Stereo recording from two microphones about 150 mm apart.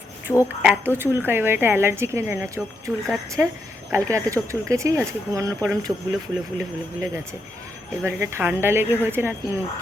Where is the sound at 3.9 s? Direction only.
20° right (ahead or behind).